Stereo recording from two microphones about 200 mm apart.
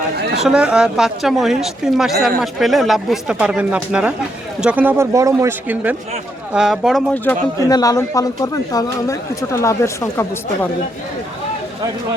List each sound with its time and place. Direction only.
0.4 s a man's voice: 5° right (ahead or behind)
7.3 s a man's voice: 20° left (ahead or behind)